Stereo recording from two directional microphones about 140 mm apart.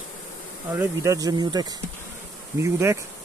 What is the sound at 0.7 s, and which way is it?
Bee, 20° right (ahead or behind).